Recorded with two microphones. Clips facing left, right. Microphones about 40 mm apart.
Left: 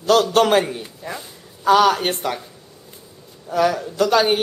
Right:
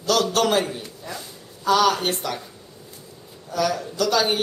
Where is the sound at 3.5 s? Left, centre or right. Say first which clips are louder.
Left 5 dB; left.